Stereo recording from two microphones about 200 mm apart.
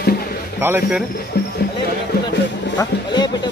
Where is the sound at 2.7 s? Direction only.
20° left (ahead or behind).